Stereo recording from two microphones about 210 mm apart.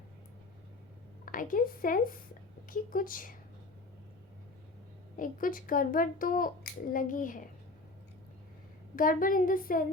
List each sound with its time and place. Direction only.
1.2 s a woman's voice: 40° left (ahead or behind)
5.1 s a child's voice: 40° left (ahead or behind)
9.0 s a child's voice: 40° left (ahead or behind)